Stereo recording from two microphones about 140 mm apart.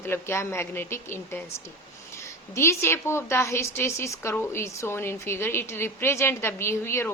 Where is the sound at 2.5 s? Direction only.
20° left (ahead or behind).